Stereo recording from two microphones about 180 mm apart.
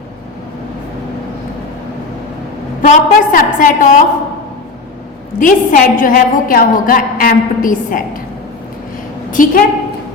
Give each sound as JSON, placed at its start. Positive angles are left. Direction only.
{"t": 2.8, "sound": "a woman's voice", "side_deg": 45}
{"t": 5.4, "sound": "a woman's voice", "side_deg": 50}
{"t": 9.3, "sound": "a woman's voice", "side_deg": 50}